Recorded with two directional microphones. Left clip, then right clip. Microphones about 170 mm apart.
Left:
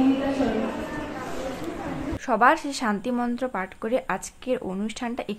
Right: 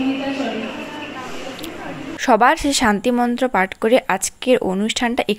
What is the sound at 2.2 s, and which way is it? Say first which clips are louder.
A woman's voice: right 6 dB; 35° right (ahead or behind).